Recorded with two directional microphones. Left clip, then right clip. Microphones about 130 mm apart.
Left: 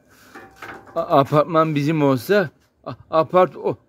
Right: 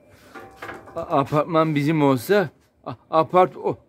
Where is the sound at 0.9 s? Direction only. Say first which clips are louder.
Left 5 dB; 45° left (ahead or behind).